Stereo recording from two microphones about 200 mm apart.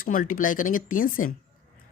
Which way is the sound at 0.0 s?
45° left (ahead or behind).